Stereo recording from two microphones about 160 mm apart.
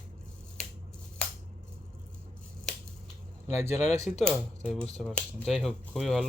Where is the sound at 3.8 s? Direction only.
45° left (ahead or behind).